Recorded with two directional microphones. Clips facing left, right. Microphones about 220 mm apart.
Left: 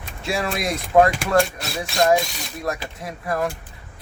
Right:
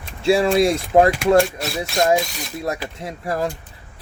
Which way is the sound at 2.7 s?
25° right (ahead or behind).